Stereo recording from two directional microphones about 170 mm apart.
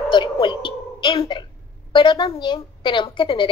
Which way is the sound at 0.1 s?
30° left (ahead or behind).